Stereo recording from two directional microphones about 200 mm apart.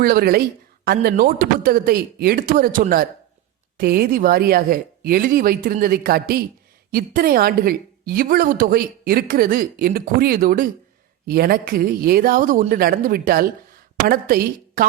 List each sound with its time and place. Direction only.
0.0 s a woman's voice: 50° right (ahead or behind)